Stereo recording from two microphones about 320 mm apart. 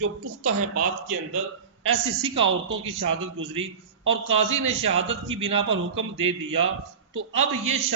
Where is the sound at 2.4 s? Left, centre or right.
Right.